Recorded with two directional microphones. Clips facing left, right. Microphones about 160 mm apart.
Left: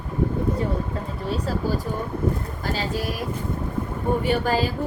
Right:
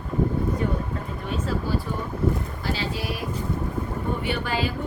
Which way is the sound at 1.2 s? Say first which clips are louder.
Left 2 dB; 35° left (ahead or behind).